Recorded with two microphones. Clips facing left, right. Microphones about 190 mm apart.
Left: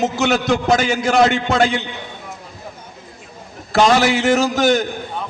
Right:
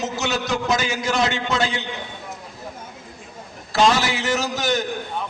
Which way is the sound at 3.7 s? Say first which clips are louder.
Left 5 dB; 55° left (ahead or behind).